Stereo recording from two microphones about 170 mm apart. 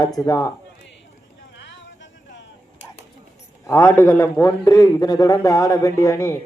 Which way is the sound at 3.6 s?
20° left (ahead or behind).